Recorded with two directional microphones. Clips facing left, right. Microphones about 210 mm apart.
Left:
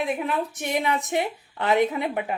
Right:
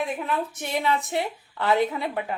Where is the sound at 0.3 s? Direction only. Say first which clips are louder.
Left 1 dB; 15° left (ahead or behind).